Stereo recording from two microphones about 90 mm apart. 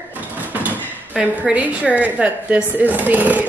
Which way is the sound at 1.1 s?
15° right (ahead or behind).